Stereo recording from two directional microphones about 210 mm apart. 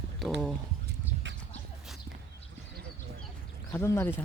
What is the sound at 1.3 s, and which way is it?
Horse, 60° right (ahead or behind).